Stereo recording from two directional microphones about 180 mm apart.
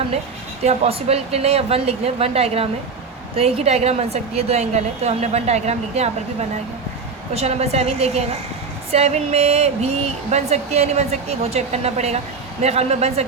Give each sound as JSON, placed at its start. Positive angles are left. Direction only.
{"t": 0.6, "sound": "a woman's voice", "side_deg": -35}
{"t": 7.3, "sound": "a woman's voice", "side_deg": -35}